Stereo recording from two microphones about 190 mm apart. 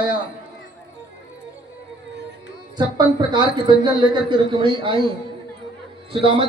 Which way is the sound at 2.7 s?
25° right (ahead or behind).